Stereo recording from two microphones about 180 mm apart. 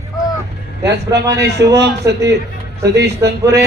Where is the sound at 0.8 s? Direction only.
70° right (ahead or behind).